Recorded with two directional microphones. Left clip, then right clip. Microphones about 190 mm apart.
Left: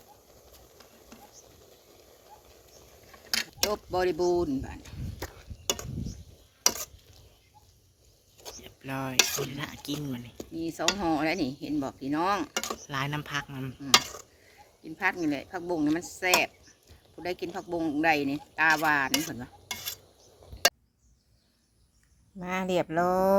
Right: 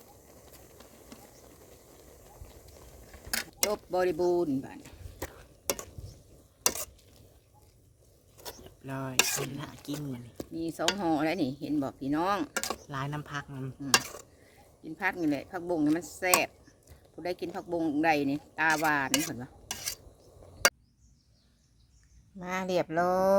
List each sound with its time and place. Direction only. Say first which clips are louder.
0.5 s a sound: right 1 dB; 25° right (ahead or behind)
3.2 s mechanisms: left 2 dB; 55° right (ahead or behind)
4.4 s stir: left 1 dB; 50° right (ahead or behind)
5.2 s a sound: even; 25° right (ahead or behind)
8.6 s cutlery: left 4 dB; centre (ahead or behind)
9.1 s stir: left 2 dB; 15° right (ahead or behind)
9.5 s speech: left 4 dB; centre (ahead or behind)
10.5 s stir: left 1 dB; 50° right (ahead or behind)
12.5 s speech: left 1 dB; 15° right (ahead or behind)
12.9 s speech: left 5 dB; centre (ahead or behind)
14.8 s stir: left 2 dB; 50° right (ahead or behind)
22.4 s speech: left 1 dB; 5° left (ahead or behind)